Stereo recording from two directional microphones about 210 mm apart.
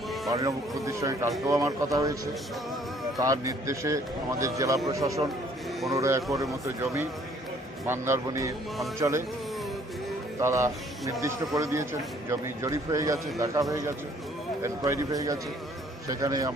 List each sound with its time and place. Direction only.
0.3 s a man's voice: 15° right (ahead or behind)
3.2 s a man's voice: 15° right (ahead or behind)
7.9 s a man's voice: 10° right (ahead or behind)
10.4 s a man's voice: 15° right (ahead or behind)